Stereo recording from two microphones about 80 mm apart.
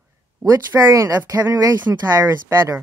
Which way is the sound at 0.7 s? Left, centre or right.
Right.